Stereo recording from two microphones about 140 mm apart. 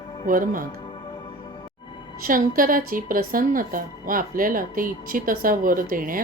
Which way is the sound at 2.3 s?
85° right.